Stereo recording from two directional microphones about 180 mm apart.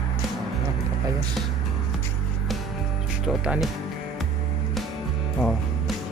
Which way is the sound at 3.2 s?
5° right (ahead or behind).